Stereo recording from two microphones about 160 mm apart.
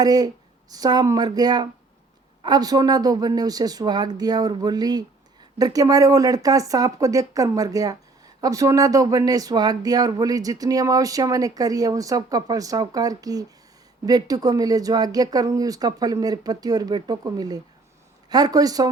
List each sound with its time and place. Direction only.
0.0 s speech: 25° right (ahead or behind)